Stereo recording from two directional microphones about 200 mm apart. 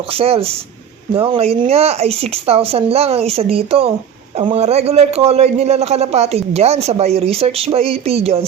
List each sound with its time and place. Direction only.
0.1 s a man's voice: 30° right (ahead or behind)